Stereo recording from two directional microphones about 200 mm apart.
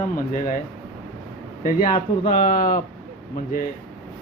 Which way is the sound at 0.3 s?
40° left (ahead or behind).